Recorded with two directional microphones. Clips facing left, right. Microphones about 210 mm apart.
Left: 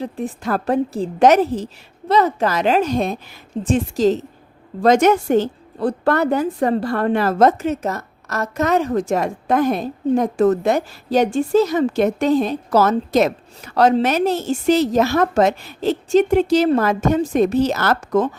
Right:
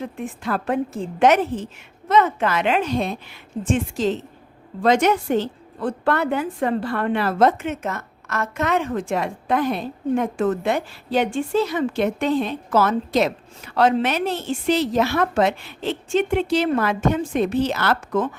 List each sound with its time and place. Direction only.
0.0 s a woman's voice: 35° left (ahead or behind)